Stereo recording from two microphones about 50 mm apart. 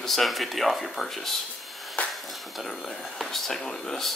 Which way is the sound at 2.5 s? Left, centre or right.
Centre.